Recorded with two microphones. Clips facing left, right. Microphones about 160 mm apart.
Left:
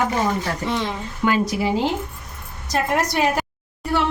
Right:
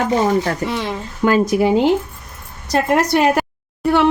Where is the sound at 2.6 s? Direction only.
65° right (ahead or behind).